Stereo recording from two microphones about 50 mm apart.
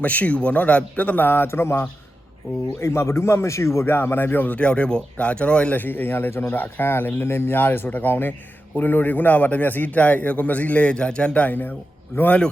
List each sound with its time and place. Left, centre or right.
0.0 s a man's voice: left
2.8 s a man's voice: left
5.7 s a man's voice: left
11.4 s a man's voice: left
12.1 s speech: left